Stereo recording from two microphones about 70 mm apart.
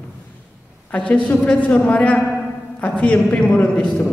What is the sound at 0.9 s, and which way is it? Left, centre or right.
A woman's voice, centre.